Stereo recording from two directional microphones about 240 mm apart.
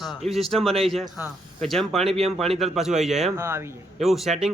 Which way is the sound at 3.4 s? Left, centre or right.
Centre.